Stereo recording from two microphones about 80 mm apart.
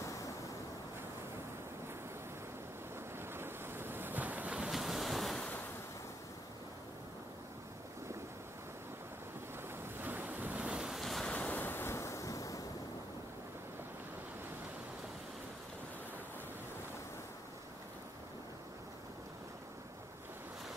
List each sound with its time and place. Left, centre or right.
3.2 s waves: right
4.6 s waves: centre
9.9 s waves: right; by 11.2 s centre
11.2 s waves: centre
11.6 s waves: left